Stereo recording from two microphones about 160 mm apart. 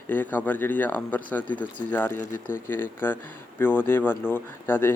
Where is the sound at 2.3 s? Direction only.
60° left (ahead or behind).